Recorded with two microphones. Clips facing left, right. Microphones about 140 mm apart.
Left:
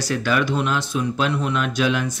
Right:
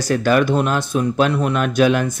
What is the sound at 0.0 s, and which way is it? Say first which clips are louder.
Speech: right 6 dB; 45° right (ahead or behind).